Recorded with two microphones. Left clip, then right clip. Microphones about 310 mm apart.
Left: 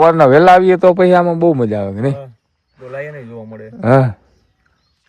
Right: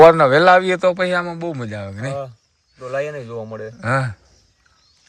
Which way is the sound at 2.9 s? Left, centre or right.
Centre.